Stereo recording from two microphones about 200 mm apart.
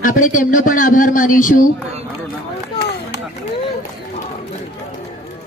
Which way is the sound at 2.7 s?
55° left (ahead or behind).